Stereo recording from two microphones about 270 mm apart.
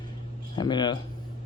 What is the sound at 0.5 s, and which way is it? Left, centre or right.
Speech, centre.